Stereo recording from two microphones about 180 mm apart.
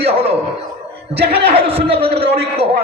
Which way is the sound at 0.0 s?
35° right (ahead or behind).